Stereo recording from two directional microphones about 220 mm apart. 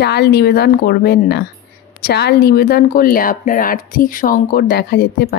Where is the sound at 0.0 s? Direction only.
45° left (ahead or behind).